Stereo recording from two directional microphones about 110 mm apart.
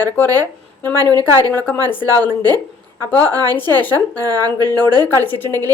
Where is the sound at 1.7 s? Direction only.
20° left (ahead or behind).